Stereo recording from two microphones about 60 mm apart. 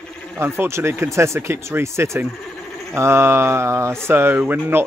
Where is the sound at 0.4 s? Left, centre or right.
Right.